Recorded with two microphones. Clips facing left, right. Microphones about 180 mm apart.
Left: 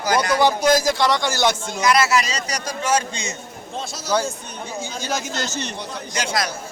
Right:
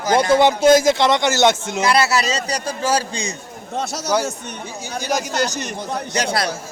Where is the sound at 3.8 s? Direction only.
70° right (ahead or behind).